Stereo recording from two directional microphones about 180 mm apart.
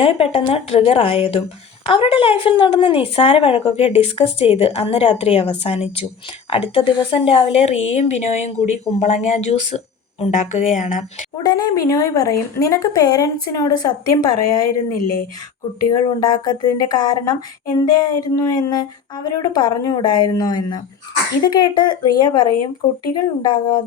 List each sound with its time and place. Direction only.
0.0 s speech: 30° left (ahead or behind)
11.4 s speech: 20° left (ahead or behind)
15.9 s speech: 25° left (ahead or behind)